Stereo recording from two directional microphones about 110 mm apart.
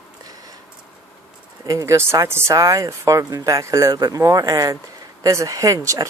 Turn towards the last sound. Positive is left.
turn(degrees=-30)  # may be behind; listen again after turning